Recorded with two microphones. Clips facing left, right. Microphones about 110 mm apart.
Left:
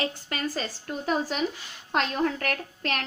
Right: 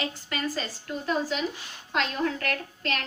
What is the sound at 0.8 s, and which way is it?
A woman's voice, 50° left (ahead or behind).